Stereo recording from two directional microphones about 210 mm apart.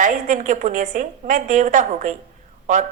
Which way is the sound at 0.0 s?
35° right (ahead or behind).